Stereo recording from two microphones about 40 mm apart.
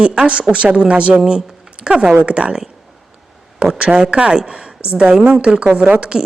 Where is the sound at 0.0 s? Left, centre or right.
Right.